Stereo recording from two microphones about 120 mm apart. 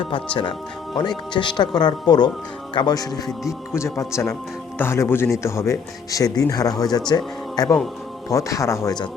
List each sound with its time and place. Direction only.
0.9 s speech: 35° left (ahead or behind)
3.7 s speech: 25° left (ahead or behind)